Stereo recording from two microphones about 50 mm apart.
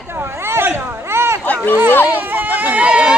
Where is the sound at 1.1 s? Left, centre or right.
Right.